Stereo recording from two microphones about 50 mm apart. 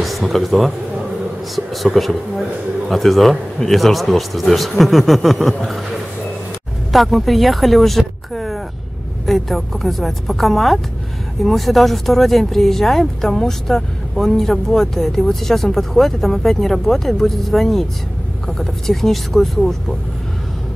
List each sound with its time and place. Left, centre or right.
0.0 s speech: centre
6.9 s speech: centre
9.2 s speech: centre